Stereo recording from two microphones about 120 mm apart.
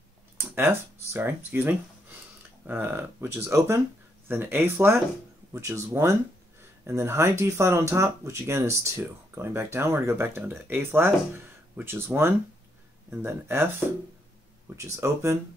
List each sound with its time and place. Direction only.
0.4 s speech: 20° right (ahead or behind)